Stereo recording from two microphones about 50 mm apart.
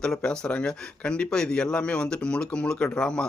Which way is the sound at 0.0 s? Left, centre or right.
Centre.